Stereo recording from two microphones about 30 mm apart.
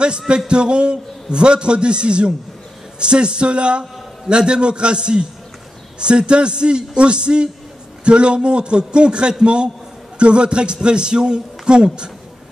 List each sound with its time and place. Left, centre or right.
0.5 s a man's voice: right